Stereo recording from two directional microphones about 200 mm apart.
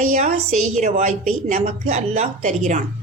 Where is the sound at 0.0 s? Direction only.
35° right (ahead or behind).